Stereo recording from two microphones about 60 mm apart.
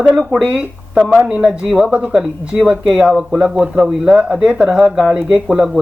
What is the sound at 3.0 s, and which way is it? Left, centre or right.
Speech, centre.